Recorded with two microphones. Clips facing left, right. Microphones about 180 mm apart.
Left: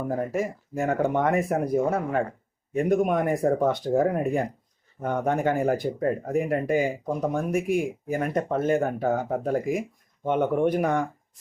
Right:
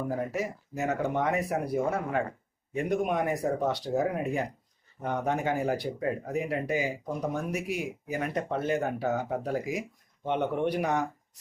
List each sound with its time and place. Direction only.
0.1 s speech: 45° left (ahead or behind)